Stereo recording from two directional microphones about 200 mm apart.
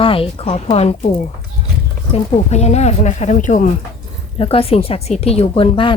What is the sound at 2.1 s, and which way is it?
Speech, 35° left (ahead or behind).